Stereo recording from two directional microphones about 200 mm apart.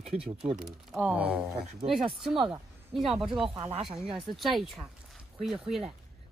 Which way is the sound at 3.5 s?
25° right (ahead or behind).